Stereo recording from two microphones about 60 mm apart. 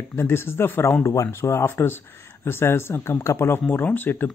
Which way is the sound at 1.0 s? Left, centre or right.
Left.